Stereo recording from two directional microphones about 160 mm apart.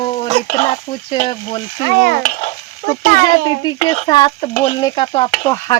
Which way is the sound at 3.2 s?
30° left (ahead or behind).